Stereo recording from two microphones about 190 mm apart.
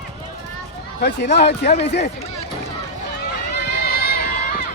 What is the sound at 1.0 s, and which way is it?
Speech, 60° left (ahead or behind).